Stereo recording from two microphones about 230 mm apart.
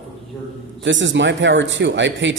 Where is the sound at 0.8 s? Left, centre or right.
Right.